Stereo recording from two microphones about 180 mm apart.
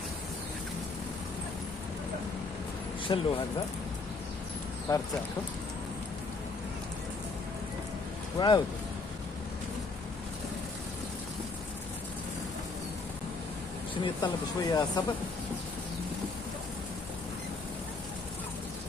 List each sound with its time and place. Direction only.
3.1 s speech: 25° left (ahead or behind)
4.9 s speech: 20° left (ahead or behind)
8.4 s speech: 25° left (ahead or behind)
14.0 s speech: 20° left (ahead or behind)